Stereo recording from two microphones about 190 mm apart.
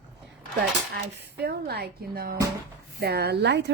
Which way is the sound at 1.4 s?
60° right (ahead or behind).